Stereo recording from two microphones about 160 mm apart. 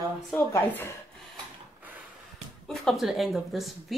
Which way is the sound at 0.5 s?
15° left (ahead or behind).